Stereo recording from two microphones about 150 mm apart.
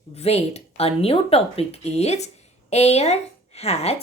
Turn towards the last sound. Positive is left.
turn(degrees=45)  # may be behind; listen again after turning